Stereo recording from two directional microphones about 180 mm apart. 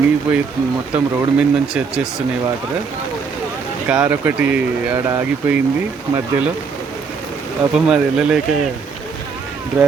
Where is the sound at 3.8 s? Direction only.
10° right (ahead or behind).